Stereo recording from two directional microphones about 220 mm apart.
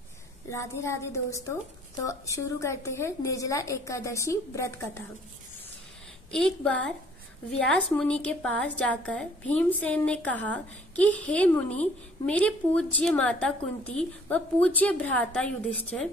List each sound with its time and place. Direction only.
0.5 s a woman's voice: 15° left (ahead or behind)
6.3 s a woman's voice: 5° left (ahead or behind)